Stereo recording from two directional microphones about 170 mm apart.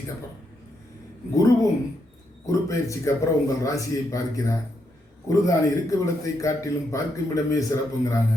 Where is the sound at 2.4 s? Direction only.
20° left (ahead or behind).